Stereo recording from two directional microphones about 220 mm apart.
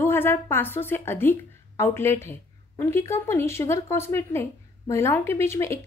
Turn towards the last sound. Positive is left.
turn(degrees=10)  # may be behind; listen again after turning